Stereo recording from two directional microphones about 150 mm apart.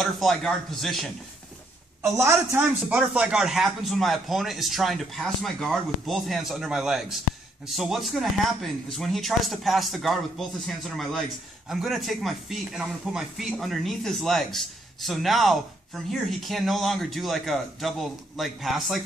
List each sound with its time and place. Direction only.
0.0 s a man's voice: centre (ahead or behind)
2.0 s speech: 15° right (ahead or behind)
3.0 s a man's voice: 5° right (ahead or behind)